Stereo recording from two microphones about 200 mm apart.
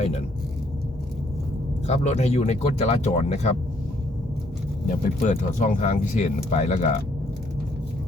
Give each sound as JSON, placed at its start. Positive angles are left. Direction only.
{"t": 0.0, "sound": "speech", "side_deg": 30}
{"t": 1.9, "sound": "speech", "side_deg": 35}
{"t": 4.9, "sound": "speech", "side_deg": 35}